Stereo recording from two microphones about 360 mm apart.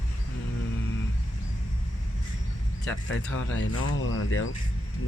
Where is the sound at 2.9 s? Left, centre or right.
Left.